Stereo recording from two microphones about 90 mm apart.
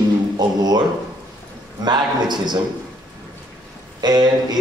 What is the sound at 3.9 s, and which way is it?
Speech, 50° right (ahead or behind).